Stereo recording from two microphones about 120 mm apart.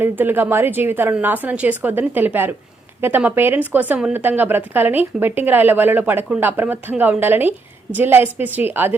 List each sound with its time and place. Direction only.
0.0 s speech: 15° right (ahead or behind)